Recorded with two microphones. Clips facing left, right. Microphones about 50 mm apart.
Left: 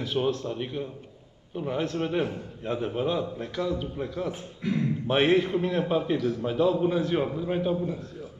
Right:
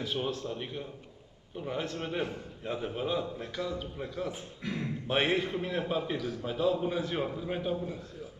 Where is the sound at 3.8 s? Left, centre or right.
Centre.